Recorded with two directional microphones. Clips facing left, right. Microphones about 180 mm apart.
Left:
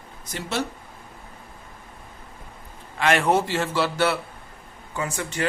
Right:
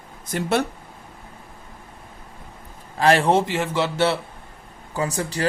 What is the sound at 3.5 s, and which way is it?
Speech, 20° right (ahead or behind).